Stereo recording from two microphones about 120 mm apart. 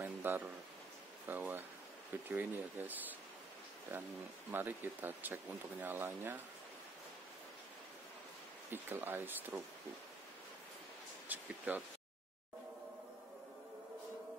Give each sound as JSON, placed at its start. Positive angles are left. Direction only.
{"t": 0.0, "sound": "a sound", "side_deg": -20}
{"t": 1.2, "sound": "speech", "side_deg": -15}
{"t": 8.6, "sound": "speech", "side_deg": -20}
{"t": 11.2, "sound": "speech", "side_deg": -15}